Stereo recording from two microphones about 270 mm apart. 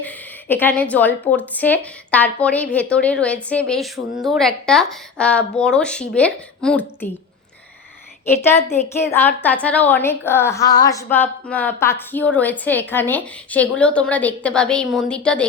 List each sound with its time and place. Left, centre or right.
0.0 s a woman's voice: centre
8.4 s a woman's voice: centre